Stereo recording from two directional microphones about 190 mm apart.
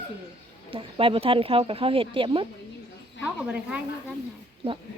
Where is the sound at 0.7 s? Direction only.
30° right (ahead or behind).